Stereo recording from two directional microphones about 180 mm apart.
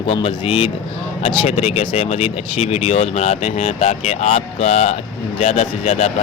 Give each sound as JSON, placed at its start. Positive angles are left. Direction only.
{"t": 0.1, "sound": "speech", "side_deg": 30}